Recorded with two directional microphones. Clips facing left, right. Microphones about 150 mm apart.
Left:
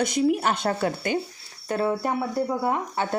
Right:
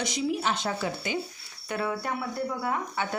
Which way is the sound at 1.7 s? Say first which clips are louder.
Left 6 dB; 35° left (ahead or behind).